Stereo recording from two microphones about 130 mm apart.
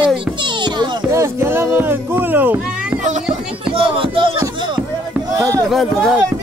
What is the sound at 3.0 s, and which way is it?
Music, 70° right (ahead or behind).